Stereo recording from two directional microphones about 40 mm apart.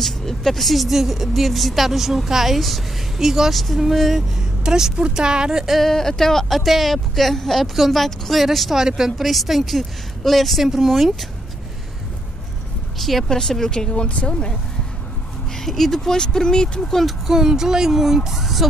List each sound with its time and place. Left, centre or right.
0.0 s speech: centre
3.5 s speech: centre
4.4 s speech: centre
5.9 s speech: centre
6.6 s speech: centre
9.2 s speech: centre
13.3 s speech: centre
15.5 s speech: centre
17.3 s speech: centre